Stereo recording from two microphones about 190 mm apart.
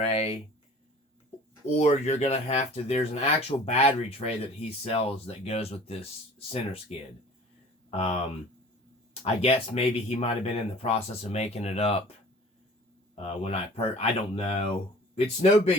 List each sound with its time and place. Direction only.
0.0 s speech: 30° left (ahead or behind)
1.8 s speech: 35° left (ahead or behind)
9.2 s speech: 30° left (ahead or behind)
13.1 s speech: 30° left (ahead or behind)